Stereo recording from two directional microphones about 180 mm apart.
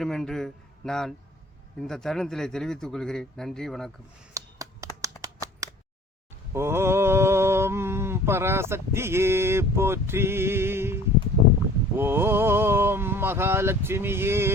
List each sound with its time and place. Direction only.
0.0 s a man's voice: centre (ahead or behind)
4.4 s a sound: 20° right (ahead or behind)
6.5 s mantra: 15° right (ahead or behind)
11.9 s speech: 10° right (ahead or behind)